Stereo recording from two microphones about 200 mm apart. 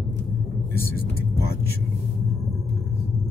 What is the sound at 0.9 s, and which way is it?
Vehicle, 50° left (ahead or behind).